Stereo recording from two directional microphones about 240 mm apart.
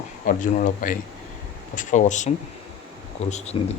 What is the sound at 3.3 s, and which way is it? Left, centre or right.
Speech, left.